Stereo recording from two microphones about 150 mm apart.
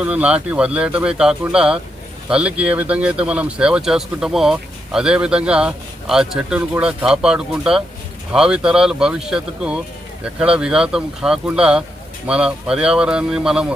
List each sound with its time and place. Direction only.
0.0 s speech: 10° right (ahead or behind)